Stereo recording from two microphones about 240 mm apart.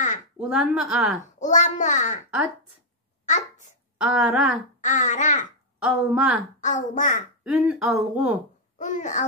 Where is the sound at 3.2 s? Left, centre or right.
Left.